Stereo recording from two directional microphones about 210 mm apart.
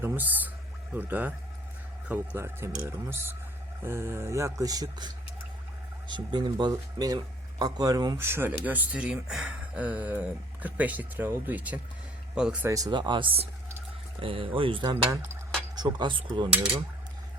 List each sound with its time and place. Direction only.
0.0 s speech: 10° right (ahead or behind)
12.7 s speech: 20° right (ahead or behind)